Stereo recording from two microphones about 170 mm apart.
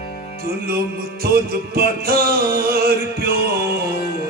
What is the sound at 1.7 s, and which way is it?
Music, 60° right (ahead or behind).